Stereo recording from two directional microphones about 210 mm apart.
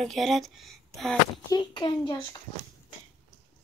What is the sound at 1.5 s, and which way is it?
Speech, 20° left (ahead or behind).